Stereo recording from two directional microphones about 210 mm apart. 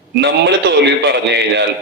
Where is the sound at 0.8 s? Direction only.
55° right (ahead or behind).